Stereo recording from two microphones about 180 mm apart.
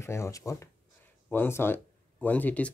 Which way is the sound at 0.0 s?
15° left (ahead or behind).